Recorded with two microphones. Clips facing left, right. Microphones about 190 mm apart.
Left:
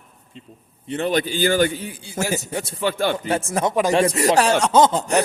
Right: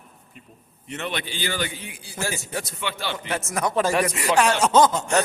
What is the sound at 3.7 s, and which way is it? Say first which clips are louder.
Speech: left 2 dB; 15° left (ahead or behind).